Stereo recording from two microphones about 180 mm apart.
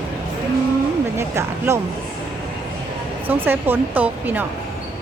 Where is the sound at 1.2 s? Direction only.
15° right (ahead or behind).